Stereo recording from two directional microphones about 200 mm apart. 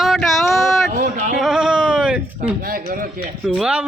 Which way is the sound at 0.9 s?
45° right (ahead or behind).